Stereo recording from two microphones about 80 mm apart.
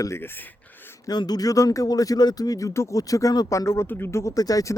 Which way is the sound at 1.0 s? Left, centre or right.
Left.